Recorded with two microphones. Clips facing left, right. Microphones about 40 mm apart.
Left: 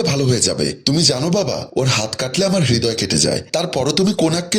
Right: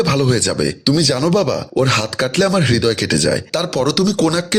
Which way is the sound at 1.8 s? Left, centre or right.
Right.